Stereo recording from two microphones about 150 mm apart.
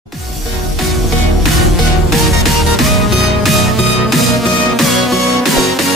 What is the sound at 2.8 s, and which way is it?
Music, centre (ahead or behind).